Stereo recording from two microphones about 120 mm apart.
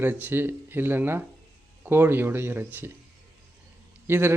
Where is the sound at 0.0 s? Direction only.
15° right (ahead or behind).